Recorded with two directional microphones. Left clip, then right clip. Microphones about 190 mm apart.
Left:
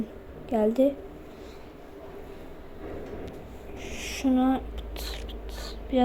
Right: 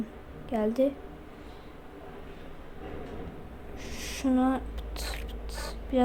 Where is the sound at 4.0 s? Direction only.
Centre (ahead or behind).